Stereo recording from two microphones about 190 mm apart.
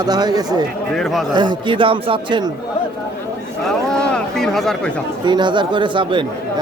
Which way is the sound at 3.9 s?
5° left (ahead or behind).